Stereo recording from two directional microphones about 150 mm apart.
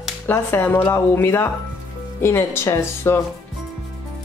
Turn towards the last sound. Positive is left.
turn(degrees=20)  # may be behind; listen again after turning